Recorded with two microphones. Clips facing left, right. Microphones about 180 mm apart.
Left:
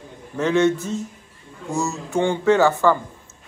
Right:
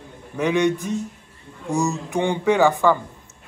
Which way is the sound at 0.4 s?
15° right (ahead or behind).